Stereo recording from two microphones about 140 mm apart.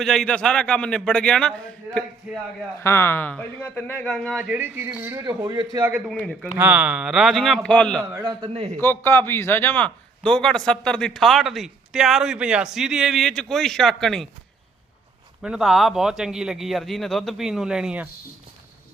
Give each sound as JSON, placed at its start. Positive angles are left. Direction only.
{"t": 0.0, "sound": "a man's voice", "side_deg": 5}
{"t": 4.4, "sound": "a man's voice", "side_deg": -10}
{"t": 6.1, "sound": "a man's voice", "side_deg": 5}
{"t": 6.6, "sound": "a man's voice", "side_deg": -10}
{"t": 8.1, "sound": "speech", "side_deg": -25}
{"t": 8.5, "sound": "a man's voice", "side_deg": -50}
{"t": 8.8, "sound": "a man's voice", "side_deg": 15}
{"t": 15.4, "sound": "a man's voice", "side_deg": -5}